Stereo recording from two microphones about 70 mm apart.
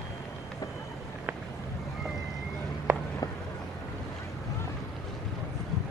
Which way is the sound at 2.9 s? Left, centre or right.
Right.